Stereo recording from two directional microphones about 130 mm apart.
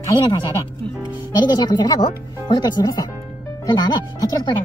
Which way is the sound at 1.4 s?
35° left (ahead or behind).